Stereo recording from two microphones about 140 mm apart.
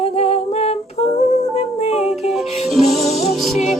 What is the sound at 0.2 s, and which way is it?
Humming, 50° left (ahead or behind).